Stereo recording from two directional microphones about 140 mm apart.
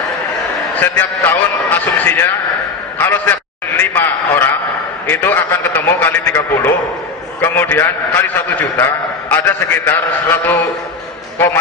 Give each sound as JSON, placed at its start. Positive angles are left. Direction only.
{"t": 0.7, "sound": "a man's voice", "side_deg": 15}